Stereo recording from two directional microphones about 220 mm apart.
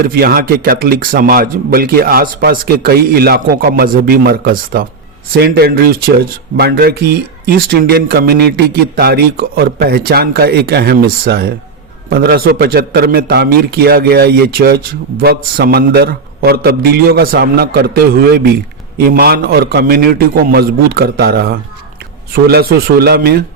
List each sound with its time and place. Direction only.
0.0 s speech: 40° right (ahead or behind)